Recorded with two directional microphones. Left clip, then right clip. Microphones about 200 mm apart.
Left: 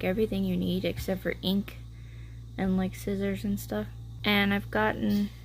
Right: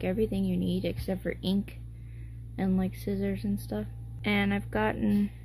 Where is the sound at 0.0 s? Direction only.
5° left (ahead or behind).